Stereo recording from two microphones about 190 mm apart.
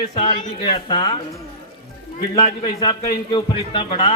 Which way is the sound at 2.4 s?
35° left (ahead or behind).